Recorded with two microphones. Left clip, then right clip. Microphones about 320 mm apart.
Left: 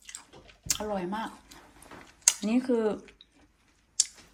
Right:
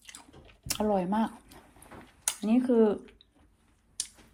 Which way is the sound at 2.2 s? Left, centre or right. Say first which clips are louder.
Left 1 dB; centre.